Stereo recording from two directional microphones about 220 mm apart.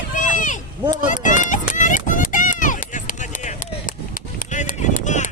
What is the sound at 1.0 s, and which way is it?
Run, 35° left (ahead or behind).